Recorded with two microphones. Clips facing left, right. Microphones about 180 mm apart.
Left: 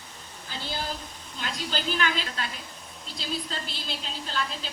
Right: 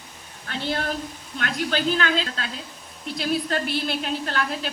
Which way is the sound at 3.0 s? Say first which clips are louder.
Right 9 dB; 65° right (ahead or behind).